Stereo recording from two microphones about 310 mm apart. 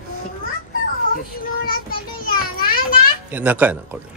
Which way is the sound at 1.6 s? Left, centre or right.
Left.